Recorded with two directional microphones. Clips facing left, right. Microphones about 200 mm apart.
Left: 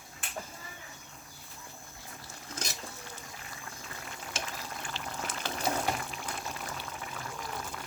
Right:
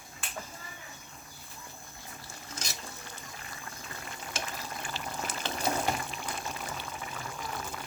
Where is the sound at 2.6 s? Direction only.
55° left (ahead or behind).